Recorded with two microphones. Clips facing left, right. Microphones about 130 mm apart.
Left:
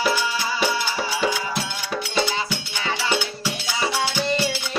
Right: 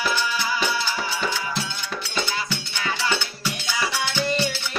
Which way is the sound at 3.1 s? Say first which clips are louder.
Left 3 dB; 15° left (ahead or behind).